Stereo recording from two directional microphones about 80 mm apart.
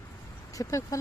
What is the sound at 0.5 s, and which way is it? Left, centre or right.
Speech, left.